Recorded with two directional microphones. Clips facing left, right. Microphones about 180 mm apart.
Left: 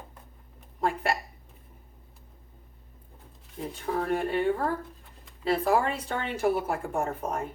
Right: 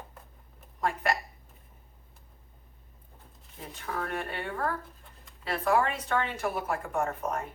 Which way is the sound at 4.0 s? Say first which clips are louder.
Left 8 dB; 30° left (ahead or behind).